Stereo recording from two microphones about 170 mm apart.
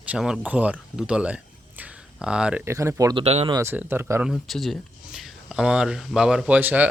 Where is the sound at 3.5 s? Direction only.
10° right (ahead or behind).